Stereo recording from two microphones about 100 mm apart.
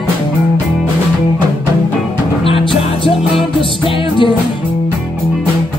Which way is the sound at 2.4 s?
65° left (ahead or behind).